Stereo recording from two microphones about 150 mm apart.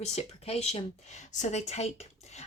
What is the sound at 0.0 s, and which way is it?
Speech, 45° left (ahead or behind).